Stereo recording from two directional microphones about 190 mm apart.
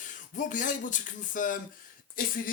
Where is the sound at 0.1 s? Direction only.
40° left (ahead or behind).